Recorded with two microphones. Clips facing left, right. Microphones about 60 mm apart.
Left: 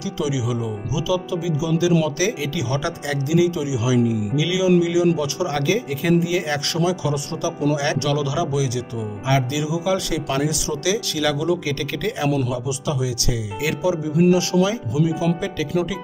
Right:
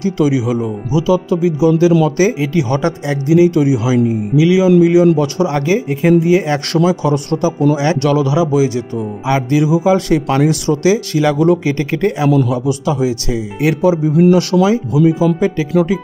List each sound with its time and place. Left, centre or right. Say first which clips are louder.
0.0 s speech: right 10 dB; right
3.5 s speech: right 8 dB; right
5.5 s speech: right 6 dB; right
8.0 s speech: right 8 dB; right
15.0 s speech: right 9 dB; right